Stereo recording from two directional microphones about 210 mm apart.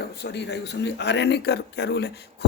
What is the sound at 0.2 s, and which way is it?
Speech, 55° left (ahead or behind).